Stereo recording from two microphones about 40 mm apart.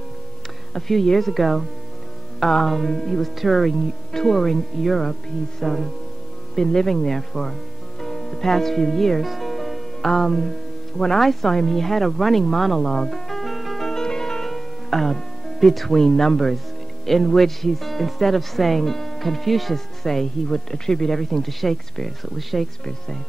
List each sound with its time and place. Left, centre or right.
0.7 s speech: centre
9.2 s music: centre
10.0 s speech: centre
12.9 s music: centre
17.0 s speech: centre